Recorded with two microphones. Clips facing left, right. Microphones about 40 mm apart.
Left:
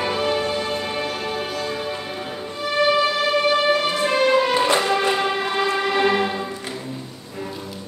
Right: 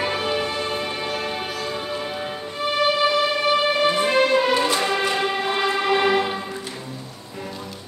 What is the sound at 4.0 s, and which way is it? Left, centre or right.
Music, centre.